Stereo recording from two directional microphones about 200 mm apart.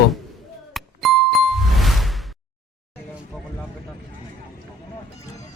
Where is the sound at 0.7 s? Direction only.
Centre (ahead or behind).